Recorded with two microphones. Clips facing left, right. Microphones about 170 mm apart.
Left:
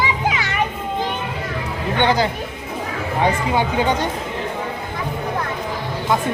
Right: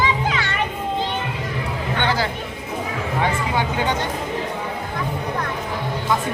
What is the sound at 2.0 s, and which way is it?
Chatter, 20° left (ahead or behind).